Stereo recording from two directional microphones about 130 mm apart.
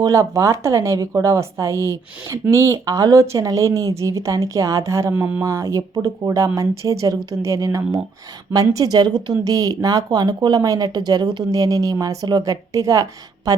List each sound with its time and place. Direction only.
0.0 s speech: 25° right (ahead or behind)
5.1 s speech: 10° right (ahead or behind)
5.4 s speech: 20° right (ahead or behind)